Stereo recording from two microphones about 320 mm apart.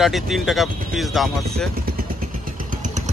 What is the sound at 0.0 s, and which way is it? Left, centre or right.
Speech, centre.